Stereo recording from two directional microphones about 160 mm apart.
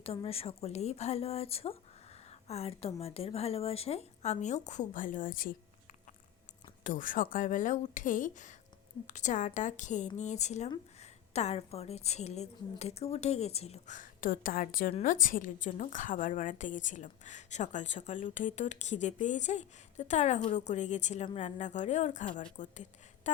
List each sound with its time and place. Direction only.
0.0 s a woman's voice: 35° left (ahead or behind); by 5.5 s 60° left (ahead or behind)
6.8 s a woman's voice: 55° left (ahead or behind)